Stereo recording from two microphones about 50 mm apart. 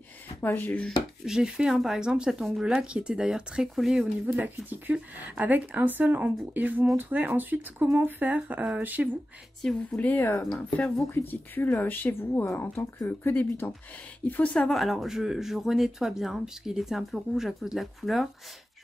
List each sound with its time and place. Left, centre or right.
0.6 s speech: left
1.2 s speech: centre
3.7 s speech: centre
4.4 s speech: right
9.6 s speech: centre
9.9 s a woman's voice: left
13.3 s speech: left
14.2 s speech: left
14.6 s speech: centre